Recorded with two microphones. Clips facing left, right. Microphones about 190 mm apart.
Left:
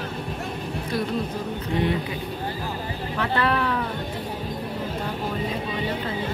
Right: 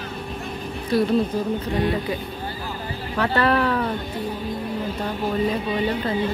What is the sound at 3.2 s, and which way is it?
Speech, 40° right (ahead or behind).